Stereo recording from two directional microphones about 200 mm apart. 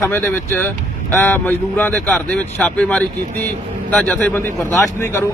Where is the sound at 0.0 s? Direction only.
15° left (ahead or behind).